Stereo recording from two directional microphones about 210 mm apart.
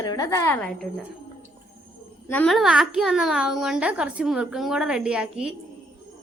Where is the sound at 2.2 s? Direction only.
5° left (ahead or behind).